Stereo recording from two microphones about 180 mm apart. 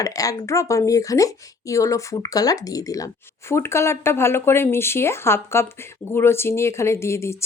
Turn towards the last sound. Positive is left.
turn(degrees=15)  # may be behind; listen again after turning